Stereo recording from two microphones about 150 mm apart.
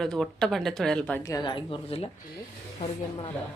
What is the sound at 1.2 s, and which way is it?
Speech, 25° left (ahead or behind).